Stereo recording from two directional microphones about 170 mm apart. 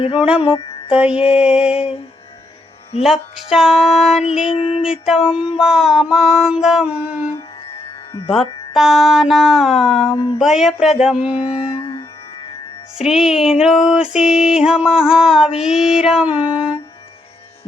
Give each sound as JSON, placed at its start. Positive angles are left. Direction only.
{"t": 0.2, "sound": "music", "side_deg": -5}
{"t": 0.4, "sound": "a sound", "side_deg": 30}
{"t": 0.9, "sound": "music", "side_deg": -5}
{"t": 3.0, "sound": "music", "side_deg": 0}
{"t": 4.4, "sound": "a sound", "side_deg": 35}
{"t": 4.8, "sound": "music", "side_deg": -5}
{"t": 13.0, "sound": "music", "side_deg": 0}